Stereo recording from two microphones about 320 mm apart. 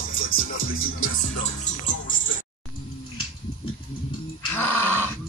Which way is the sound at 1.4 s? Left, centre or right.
Left.